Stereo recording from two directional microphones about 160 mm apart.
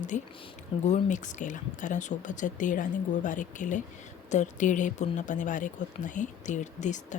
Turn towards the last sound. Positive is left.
turn(degrees=50)  # may be behind; listen again after turning